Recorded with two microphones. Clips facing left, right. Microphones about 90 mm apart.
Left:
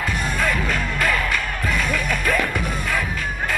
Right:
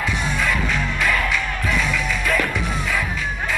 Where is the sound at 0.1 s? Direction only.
45° left (ahead or behind).